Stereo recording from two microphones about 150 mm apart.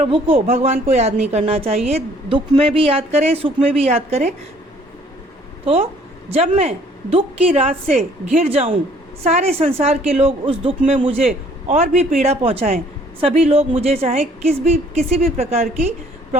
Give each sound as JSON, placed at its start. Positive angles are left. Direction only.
{"t": 0.0, "sound": "a woman's voice", "side_deg": -40}
{"t": 6.2, "sound": "a woman's voice", "side_deg": -40}
{"t": 14.1, "sound": "a woman's voice", "side_deg": -55}